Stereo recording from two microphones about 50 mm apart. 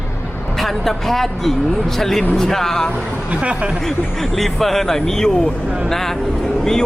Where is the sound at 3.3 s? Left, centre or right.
Right.